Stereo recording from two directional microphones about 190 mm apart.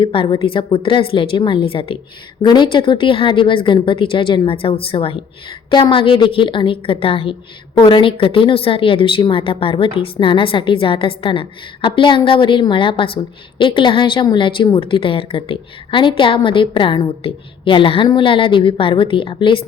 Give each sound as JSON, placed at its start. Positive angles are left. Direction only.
{"t": 0.0, "sound": "a woman's voice", "side_deg": 25}